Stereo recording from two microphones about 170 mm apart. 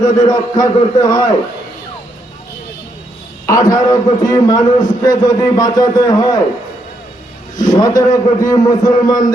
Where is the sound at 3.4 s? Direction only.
20° left (ahead or behind).